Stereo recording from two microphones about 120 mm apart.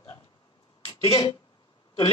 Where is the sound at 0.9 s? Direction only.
50° left (ahead or behind).